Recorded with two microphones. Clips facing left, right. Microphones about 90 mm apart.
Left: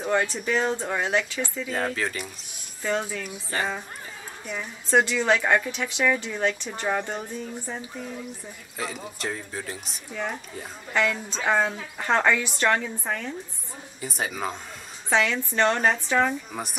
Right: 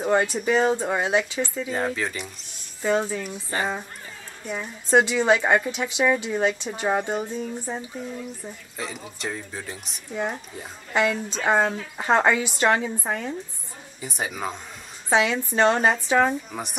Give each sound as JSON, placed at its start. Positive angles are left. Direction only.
{"t": 0.2, "sound": "a woman's voice", "side_deg": -10}
{"t": 6.9, "sound": "speech", "side_deg": -20}
{"t": 8.7, "sound": "speech", "side_deg": 0}
{"t": 10.1, "sound": "a woman's voice", "side_deg": -10}
{"t": 14.0, "sound": "a woman's voice", "side_deg": 0}
{"t": 16.5, "sound": "speech", "side_deg": 0}